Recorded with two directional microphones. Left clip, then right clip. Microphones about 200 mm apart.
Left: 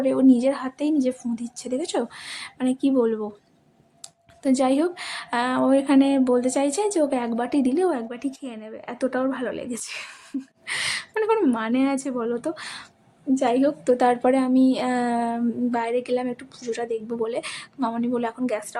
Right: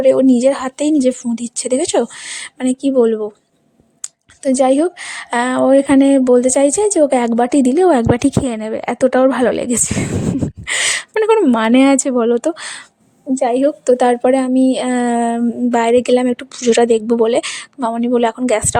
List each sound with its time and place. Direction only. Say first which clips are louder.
0.0 s speech: right 9 dB; 35° right (ahead or behind)
11.6 s speech: right 12 dB; 45° right (ahead or behind)